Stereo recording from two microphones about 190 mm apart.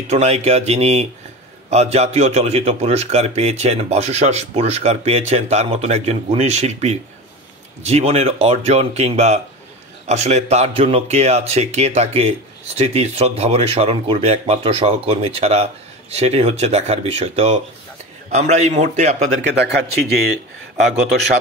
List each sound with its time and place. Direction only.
0.1 s speech: 35° right (ahead or behind)
19.4 s speech: 65° right (ahead or behind)